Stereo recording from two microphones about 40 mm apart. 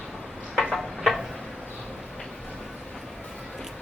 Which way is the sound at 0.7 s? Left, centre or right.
Centre.